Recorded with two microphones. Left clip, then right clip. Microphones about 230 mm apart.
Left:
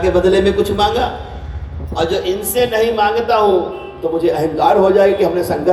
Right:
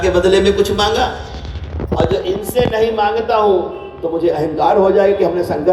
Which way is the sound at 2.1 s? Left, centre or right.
Left.